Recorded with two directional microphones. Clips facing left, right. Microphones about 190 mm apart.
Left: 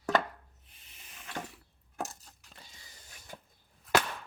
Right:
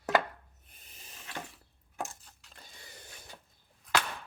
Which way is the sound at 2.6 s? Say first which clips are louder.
Right 6 dB; 60° right (ahead or behind).